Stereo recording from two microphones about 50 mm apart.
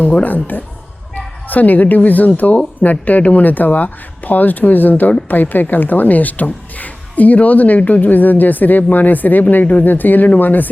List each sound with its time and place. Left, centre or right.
0.0 s a woman's voice: left